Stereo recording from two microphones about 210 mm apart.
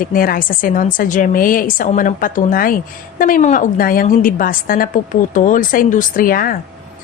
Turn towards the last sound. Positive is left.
turn(degrees=40)  # may be behind; listen again after turning